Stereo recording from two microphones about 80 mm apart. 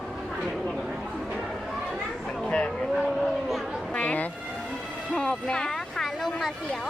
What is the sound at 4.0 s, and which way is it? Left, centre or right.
Vehicle, centre.